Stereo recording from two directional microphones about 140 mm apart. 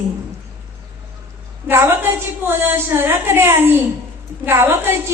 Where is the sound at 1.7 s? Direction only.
15° right (ahead or behind).